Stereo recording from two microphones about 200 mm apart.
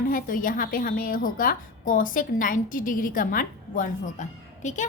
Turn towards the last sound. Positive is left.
turn(degrees=40)  # may be behind; listen again after turning